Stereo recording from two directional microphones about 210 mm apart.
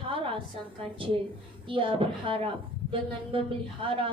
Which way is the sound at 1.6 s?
25° right (ahead or behind).